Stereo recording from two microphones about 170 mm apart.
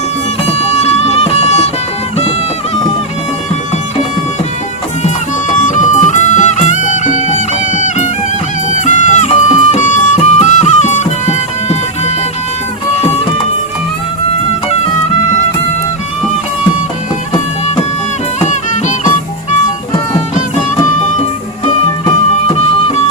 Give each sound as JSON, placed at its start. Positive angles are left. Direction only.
{"t": 0.5, "sound": "music", "side_deg": 40}
{"t": 5.5, "sound": "music", "side_deg": 45}
{"t": 18.3, "sound": "music", "side_deg": 45}
{"t": 21.0, "sound": "music", "side_deg": 35}